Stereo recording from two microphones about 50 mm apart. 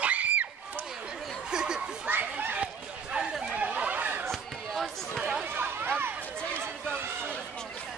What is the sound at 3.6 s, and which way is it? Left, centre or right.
Chatter, right.